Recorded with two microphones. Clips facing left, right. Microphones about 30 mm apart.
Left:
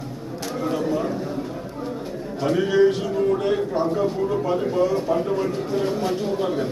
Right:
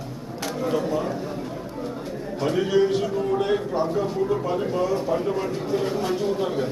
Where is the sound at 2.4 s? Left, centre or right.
Centre.